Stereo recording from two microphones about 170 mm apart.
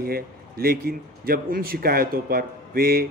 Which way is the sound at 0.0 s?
60° right (ahead or behind).